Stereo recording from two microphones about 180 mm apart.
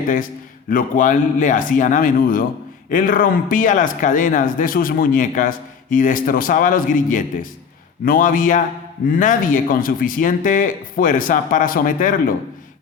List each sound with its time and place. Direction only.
0.7 s speech: 50° left (ahead or behind)